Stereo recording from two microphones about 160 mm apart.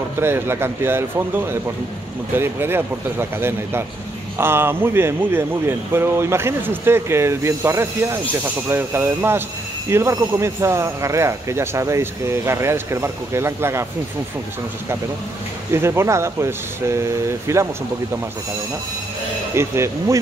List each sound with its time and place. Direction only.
0.2 s speech: 15° right (ahead or behind)
15.7 s speech: 15° right (ahead or behind)
19.5 s speech: 15° right (ahead or behind)